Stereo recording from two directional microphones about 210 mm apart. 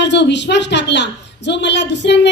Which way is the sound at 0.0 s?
55° left (ahead or behind).